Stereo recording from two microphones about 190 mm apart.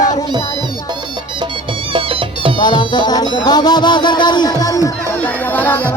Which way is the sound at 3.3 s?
20° left (ahead or behind).